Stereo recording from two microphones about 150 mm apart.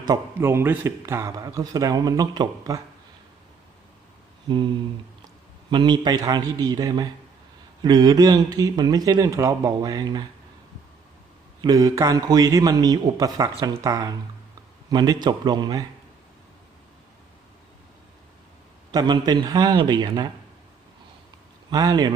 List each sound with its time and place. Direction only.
0.3 s a man's voice: 15° right (ahead or behind)
4.4 s a sound: 30° right (ahead or behind)
5.7 s speech: 30° right (ahead or behind)
11.6 s speech: 25° right (ahead or behind)
18.9 s speech: 30° right (ahead or behind)
21.7 s speech: 25° right (ahead or behind)